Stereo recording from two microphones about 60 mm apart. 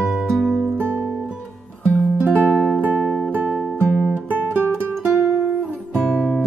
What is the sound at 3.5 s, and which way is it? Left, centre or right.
Music, centre.